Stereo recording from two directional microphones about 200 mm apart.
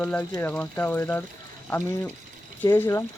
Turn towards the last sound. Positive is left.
turn(degrees=15)  # may be behind; listen again after turning